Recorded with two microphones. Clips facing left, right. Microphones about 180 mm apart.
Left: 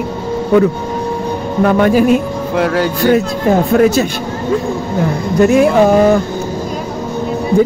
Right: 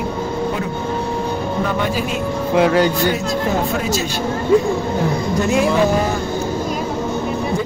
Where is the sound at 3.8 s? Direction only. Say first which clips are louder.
Left 10 dB; 55° left (ahead or behind).